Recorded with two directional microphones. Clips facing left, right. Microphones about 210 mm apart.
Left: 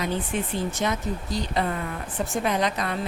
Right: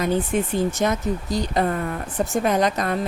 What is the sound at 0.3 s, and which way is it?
A woman's voice, 45° right (ahead or behind).